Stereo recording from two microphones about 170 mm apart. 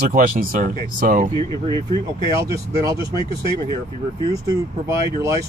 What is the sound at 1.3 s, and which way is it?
Speech, 25° left (ahead or behind).